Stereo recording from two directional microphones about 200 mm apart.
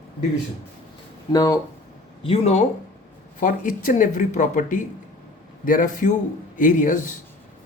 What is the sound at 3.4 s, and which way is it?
Speech, 45° left (ahead or behind).